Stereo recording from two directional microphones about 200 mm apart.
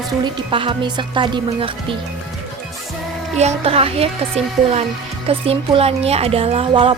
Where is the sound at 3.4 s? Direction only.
30° right (ahead or behind).